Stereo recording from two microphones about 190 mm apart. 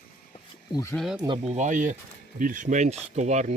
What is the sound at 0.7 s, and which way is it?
Speech, 15° left (ahead or behind).